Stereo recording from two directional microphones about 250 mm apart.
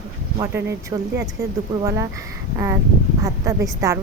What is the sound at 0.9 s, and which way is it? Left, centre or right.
A woman's voice, centre.